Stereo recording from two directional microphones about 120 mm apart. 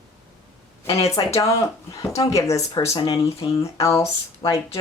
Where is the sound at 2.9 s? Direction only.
40° left (ahead or behind).